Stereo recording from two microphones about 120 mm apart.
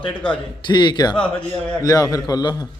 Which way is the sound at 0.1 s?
10° left (ahead or behind).